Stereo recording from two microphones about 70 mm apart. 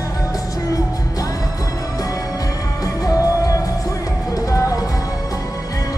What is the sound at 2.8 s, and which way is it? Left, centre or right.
Music, left.